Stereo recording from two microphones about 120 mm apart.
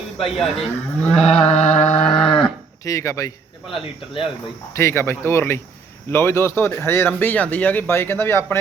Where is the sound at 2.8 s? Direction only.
25° left (ahead or behind).